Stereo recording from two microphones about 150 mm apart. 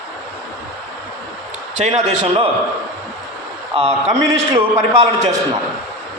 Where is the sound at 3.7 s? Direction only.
35° right (ahead or behind).